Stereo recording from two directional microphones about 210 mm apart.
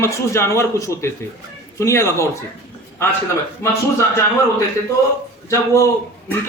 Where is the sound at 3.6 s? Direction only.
15° left (ahead or behind).